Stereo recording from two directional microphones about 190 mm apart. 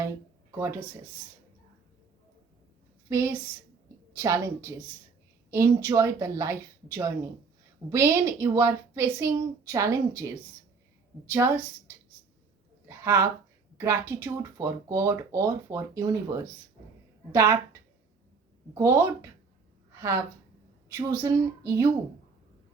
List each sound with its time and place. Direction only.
0.5 s speech: 15° right (ahead or behind)
3.1 s speech: 15° right (ahead or behind)
12.9 s a sound: 15° right (ahead or behind)
13.7 s a woman's voice: 15° right (ahead or behind)